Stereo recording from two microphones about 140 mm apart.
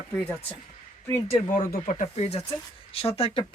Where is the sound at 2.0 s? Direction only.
45° left (ahead or behind).